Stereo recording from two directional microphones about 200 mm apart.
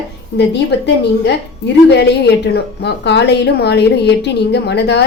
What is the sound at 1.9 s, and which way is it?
A woman's voice, 55° left (ahead or behind).